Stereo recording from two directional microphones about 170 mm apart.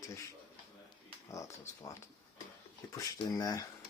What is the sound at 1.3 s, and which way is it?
Speech, 20° left (ahead or behind).